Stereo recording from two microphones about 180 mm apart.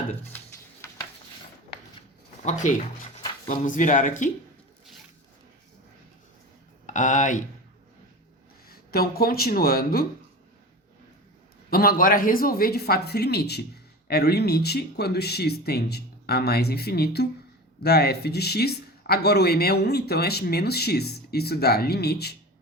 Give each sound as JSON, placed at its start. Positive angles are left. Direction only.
{"t": 0.3, "sound": "a sound", "side_deg": 15}
{"t": 2.4, "sound": "speech", "side_deg": 40}
{"t": 6.8, "sound": "speech", "side_deg": 45}
{"t": 8.7, "sound": "speech", "side_deg": 55}
{"t": 11.7, "sound": "speech", "side_deg": 55}